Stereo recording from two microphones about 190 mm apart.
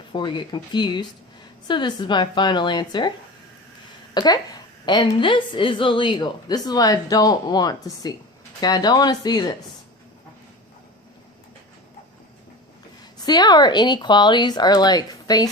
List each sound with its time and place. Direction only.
0.1 s a woman's voice: 25° left (ahead or behind)
4.1 s a woman's voice: 20° left (ahead or behind)
13.2 s a woman's voice: 20° left (ahead or behind)